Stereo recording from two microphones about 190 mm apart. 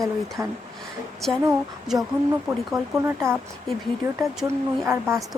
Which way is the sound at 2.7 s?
15° right (ahead or behind).